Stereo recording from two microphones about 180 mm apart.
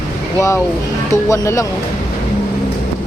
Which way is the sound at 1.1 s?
15° left (ahead or behind).